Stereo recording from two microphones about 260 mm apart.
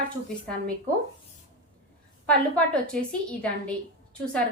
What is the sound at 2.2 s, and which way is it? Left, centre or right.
A woman's voice, centre.